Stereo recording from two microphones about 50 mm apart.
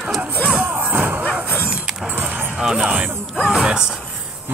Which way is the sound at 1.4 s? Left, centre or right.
Left.